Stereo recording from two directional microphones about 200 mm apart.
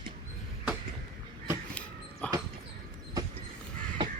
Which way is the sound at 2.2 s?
5° left (ahead or behind).